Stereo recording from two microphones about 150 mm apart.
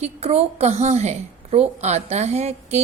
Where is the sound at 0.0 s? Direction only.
45° right (ahead or behind).